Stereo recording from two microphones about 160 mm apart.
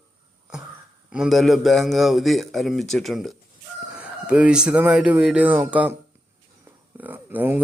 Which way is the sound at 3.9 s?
5° right (ahead or behind).